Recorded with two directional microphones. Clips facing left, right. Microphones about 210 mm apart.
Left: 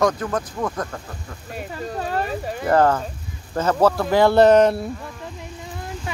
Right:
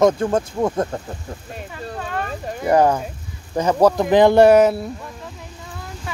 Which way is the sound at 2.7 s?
15° right (ahead or behind).